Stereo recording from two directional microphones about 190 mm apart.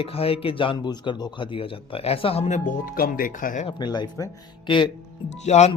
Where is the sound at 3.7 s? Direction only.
20° left (ahead or behind).